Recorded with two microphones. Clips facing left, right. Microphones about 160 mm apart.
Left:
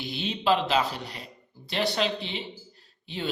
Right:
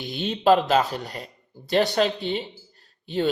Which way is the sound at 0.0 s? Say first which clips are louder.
Right 6 dB; 45° right (ahead or behind).